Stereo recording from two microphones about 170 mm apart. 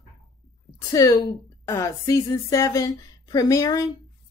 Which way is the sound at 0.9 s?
25° left (ahead or behind).